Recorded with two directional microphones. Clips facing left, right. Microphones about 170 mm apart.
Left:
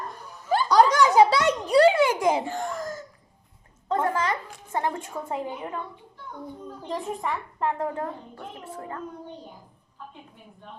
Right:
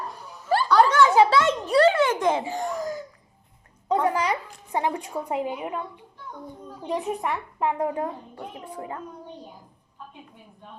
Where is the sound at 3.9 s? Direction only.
15° right (ahead or behind).